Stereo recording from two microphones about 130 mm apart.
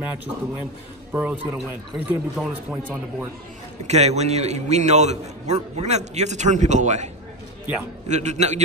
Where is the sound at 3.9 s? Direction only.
55° right (ahead or behind).